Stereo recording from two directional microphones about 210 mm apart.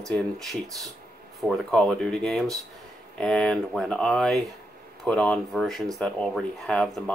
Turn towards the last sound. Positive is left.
turn(degrees=0)  # may be behind; listen again after turning